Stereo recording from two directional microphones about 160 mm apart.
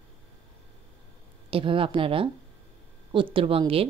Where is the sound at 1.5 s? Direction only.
35° right (ahead or behind).